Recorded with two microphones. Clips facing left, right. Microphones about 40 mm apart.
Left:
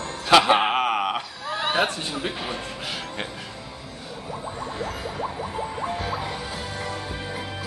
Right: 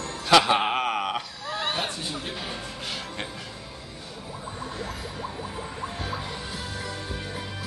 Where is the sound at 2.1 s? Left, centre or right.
Left.